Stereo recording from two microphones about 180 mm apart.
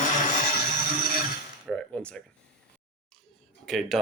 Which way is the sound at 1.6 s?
5° left (ahead or behind).